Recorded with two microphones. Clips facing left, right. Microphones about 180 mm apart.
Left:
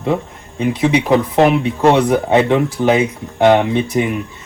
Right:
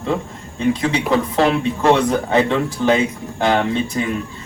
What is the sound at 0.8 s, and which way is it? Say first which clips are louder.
Speech: left 4 dB; 15° left (ahead or behind).